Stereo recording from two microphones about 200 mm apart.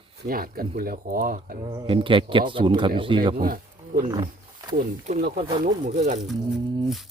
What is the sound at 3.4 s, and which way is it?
Speech, 45° right (ahead or behind).